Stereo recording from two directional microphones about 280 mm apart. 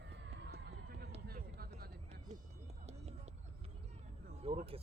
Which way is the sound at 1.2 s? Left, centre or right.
Right.